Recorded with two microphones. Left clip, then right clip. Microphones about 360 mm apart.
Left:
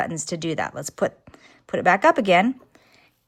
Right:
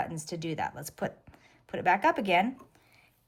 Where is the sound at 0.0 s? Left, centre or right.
Centre.